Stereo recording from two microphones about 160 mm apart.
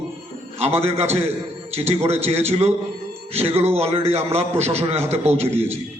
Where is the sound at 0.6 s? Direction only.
40° right (ahead or behind).